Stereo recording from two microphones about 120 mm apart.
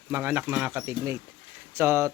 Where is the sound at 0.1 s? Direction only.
20° right (ahead or behind).